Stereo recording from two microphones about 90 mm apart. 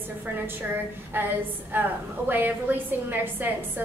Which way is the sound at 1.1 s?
25° right (ahead or behind).